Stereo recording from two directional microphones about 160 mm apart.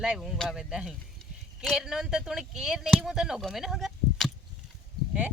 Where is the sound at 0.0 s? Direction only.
5° right (ahead or behind).